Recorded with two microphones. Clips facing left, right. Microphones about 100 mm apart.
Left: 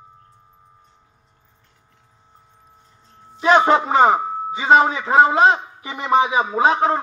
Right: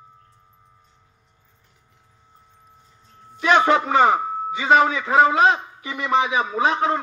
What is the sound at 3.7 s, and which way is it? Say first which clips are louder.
A man's voice: left 2 dB; 30° left (ahead or behind).